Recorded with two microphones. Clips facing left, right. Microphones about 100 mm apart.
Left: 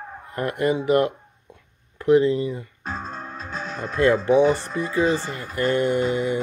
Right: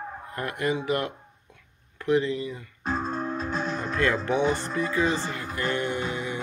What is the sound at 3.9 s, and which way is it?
Speech, 25° left (ahead or behind).